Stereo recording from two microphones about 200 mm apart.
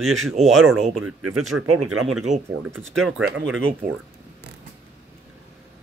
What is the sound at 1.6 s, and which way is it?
Speech, 90° right.